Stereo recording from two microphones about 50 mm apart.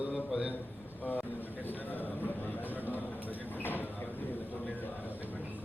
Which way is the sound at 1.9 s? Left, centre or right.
Left.